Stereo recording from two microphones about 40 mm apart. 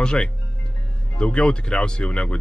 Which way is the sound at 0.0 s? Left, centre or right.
Left.